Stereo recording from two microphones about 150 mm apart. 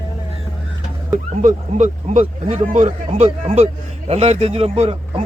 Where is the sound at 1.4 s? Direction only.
55° right (ahead or behind).